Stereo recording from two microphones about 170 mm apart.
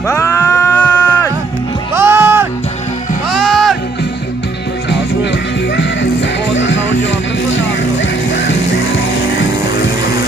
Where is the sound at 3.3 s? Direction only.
Centre (ahead or behind).